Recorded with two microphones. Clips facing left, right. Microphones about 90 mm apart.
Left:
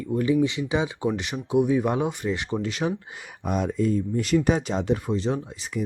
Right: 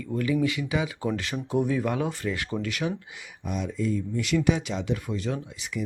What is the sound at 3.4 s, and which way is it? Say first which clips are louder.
Speech: left 5 dB; 50° left (ahead or behind).